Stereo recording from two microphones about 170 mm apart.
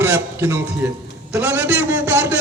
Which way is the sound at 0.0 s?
15° right (ahead or behind).